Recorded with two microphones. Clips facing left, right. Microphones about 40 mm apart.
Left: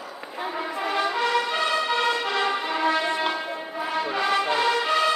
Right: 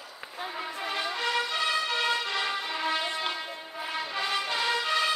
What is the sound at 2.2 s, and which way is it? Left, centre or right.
Vehicle, left.